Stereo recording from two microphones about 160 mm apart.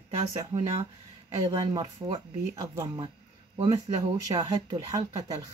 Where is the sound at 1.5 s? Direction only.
30° right (ahead or behind).